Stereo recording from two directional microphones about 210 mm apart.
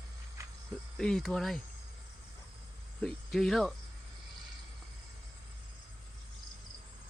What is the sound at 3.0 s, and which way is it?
Speech, centre (ahead or behind).